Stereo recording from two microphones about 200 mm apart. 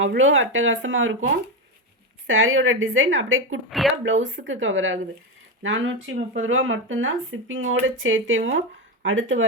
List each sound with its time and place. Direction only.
0.2 s speech: 75° right (ahead or behind)
3.7 s speech: centre (ahead or behind)
4.0 s speech: 70° right (ahead or behind)